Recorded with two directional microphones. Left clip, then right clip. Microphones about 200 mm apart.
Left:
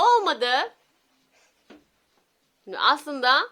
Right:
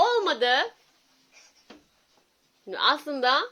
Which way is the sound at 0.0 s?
5° left (ahead or behind).